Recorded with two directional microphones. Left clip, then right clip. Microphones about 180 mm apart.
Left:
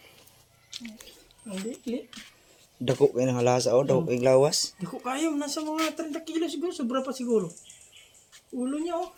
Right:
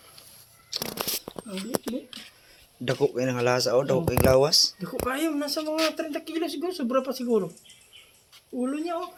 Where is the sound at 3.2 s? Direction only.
40° left (ahead or behind); by 7.2 s 25° left (ahead or behind).